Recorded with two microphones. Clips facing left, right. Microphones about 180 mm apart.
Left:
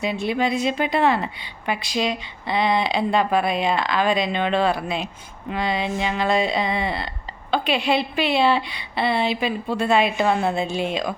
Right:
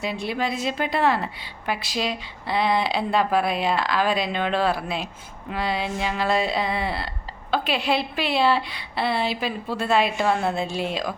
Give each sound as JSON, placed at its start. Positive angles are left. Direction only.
{"t": 0.0, "sound": "a woman's voice", "side_deg": 0}